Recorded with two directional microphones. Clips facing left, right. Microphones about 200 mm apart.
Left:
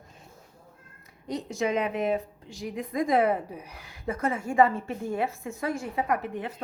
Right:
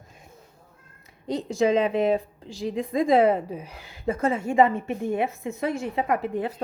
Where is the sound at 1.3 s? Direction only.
30° right (ahead or behind).